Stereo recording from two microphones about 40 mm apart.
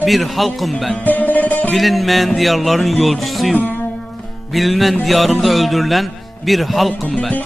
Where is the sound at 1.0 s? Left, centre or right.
Left.